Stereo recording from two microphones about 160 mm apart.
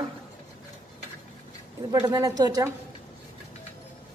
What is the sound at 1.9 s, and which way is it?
Speech, 25° right (ahead or behind).